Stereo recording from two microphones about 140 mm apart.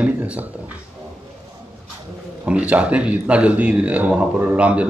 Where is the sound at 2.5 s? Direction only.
10° right (ahead or behind).